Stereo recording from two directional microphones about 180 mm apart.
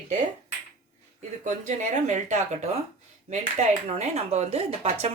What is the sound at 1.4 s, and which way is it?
A woman's voice, 40° right (ahead or behind).